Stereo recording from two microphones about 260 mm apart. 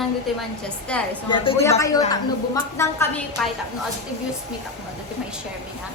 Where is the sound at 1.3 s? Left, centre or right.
Centre.